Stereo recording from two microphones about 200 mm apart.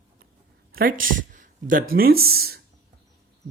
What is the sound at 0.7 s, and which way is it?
Speech, 45° right (ahead or behind).